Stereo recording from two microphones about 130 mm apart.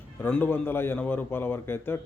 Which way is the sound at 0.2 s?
15° left (ahead or behind).